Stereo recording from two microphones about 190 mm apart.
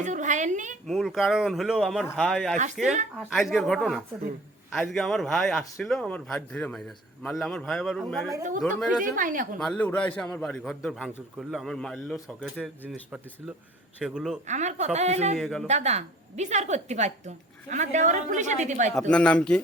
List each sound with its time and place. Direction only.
0.0 s a woman's voice: 40° right (ahead or behind)
0.9 s speech: centre (ahead or behind)
9.1 s a woman's voice: 45° right (ahead or behind)
9.6 s speech: 5° left (ahead or behind)
14.0 s speech: 5° right (ahead or behind)
14.4 s a woman's voice: 40° right (ahead or behind)
15.4 s speech: centre (ahead or behind)
15.6 s a woman's voice: 35° right (ahead or behind)
19.1 s speech: 5° left (ahead or behind)